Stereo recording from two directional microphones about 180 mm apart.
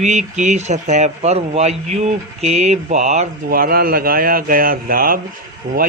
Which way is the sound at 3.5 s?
55° right (ahead or behind).